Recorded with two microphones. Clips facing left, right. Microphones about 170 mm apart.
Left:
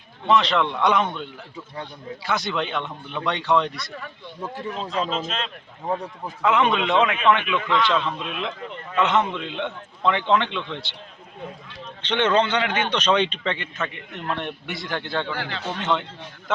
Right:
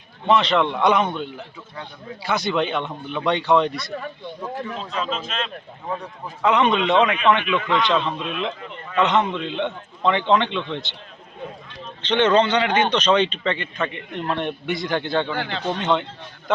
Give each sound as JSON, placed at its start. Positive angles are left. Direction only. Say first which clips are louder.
{"t": 0.3, "sound": "a man's voice", "louder": "right 2 dB", "side_deg": 0}
{"t": 4.8, "sound": "a man's voice", "louder": "left 5 dB", "side_deg": 35}
{"t": 6.4, "sound": "a man's voice", "louder": "right 2 dB", "side_deg": 0}
{"t": 7.7, "sound": "a man's voice", "louder": "right 1 dB", "side_deg": -15}
{"t": 8.2, "sound": "a man's voice", "louder": "right 3 dB", "side_deg": 5}
{"t": 12.0, "sound": "a man's voice", "louder": "right 3 dB", "side_deg": 10}
{"t": 15.3, "sound": "speech", "louder": "right 3 dB", "side_deg": -25}
{"t": 15.8, "sound": "a man's voice", "louder": "right 2 dB", "side_deg": 0}